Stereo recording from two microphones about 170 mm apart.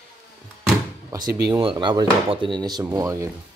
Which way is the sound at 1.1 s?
25° right (ahead or behind).